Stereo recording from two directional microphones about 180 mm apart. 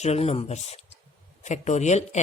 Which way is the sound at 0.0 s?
35° left (ahead or behind).